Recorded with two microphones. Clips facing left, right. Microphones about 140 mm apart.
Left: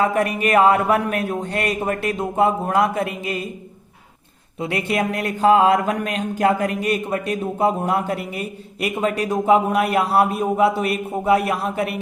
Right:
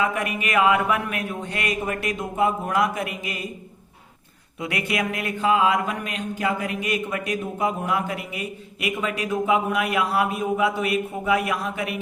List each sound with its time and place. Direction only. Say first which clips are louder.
0.0 s speech: left 6 dB; 35° left (ahead or behind)
4.6 s speech: left 4 dB; 30° left (ahead or behind)